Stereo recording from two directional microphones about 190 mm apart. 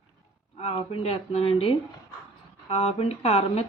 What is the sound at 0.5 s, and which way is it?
Speech, 30° left (ahead or behind).